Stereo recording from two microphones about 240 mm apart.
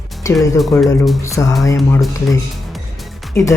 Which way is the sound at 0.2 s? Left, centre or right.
Centre.